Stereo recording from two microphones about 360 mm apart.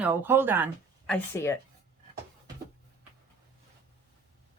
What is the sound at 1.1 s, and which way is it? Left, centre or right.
Speech, centre.